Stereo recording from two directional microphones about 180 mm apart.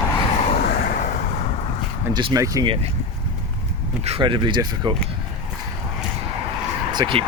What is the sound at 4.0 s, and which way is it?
Speech, 30° right (ahead or behind).